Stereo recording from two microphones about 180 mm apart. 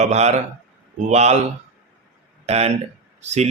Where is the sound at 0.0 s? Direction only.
40° right (ahead or behind).